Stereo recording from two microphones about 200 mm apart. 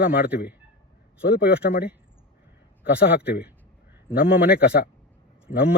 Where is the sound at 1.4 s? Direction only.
50° left (ahead or behind).